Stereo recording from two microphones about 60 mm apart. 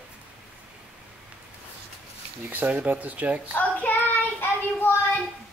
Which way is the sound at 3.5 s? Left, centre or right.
Left.